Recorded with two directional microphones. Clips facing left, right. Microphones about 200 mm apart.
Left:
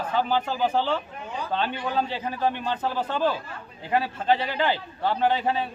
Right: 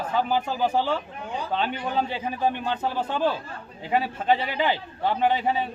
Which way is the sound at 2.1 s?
10° right (ahead or behind).